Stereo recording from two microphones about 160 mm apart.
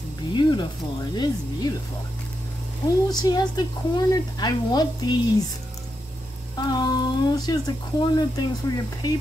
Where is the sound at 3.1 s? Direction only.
25° left (ahead or behind).